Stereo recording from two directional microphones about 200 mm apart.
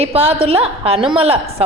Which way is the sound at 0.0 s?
30° right (ahead or behind).